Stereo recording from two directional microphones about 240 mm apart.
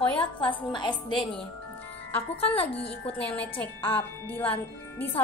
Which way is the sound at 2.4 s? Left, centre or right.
Left.